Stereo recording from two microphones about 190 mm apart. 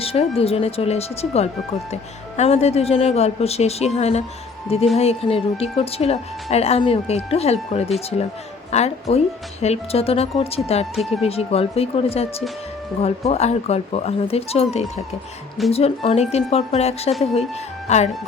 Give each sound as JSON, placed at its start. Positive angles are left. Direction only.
{"t": 0.0, "sound": "a woman's voice", "side_deg": 30}
{"t": 10.9, "sound": "speech", "side_deg": 0}
{"t": 11.2, "sound": "a woman's voice", "side_deg": 30}